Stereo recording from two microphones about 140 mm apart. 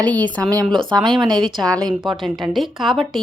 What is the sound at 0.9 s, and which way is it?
Speech, 35° right (ahead or behind).